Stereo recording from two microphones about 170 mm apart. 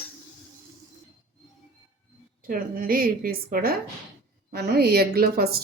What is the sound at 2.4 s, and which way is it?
A woman's voice, 55° right (ahead or behind).